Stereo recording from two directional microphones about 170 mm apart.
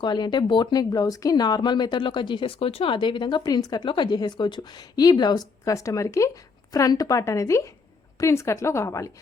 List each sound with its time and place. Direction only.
0.0 s a woman's voice: 25° left (ahead or behind)